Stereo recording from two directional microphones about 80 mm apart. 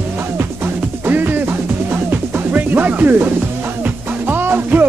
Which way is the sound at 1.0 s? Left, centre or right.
Right.